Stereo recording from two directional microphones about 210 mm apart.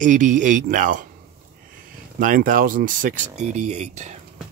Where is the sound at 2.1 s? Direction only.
40° right (ahead or behind).